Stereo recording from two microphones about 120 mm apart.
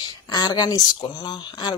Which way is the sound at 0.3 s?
35° left (ahead or behind).